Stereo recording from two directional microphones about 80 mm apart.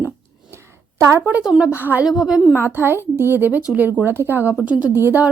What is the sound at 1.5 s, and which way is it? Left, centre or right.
Speech, centre.